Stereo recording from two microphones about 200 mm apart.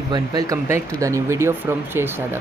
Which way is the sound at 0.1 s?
20° right (ahead or behind).